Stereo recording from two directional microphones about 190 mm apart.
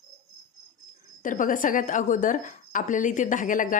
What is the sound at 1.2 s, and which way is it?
A woman's voice, 45° left (ahead or behind).